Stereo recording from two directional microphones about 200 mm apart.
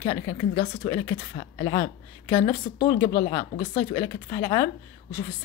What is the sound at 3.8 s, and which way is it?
Speech, 15° left (ahead or behind).